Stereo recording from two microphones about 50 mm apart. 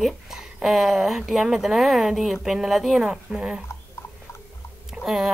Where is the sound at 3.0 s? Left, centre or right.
Centre.